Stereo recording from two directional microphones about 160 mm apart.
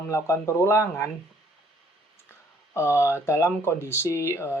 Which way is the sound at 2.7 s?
15° left (ahead or behind).